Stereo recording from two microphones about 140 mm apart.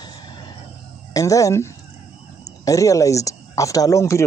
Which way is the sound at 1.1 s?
25° left (ahead or behind).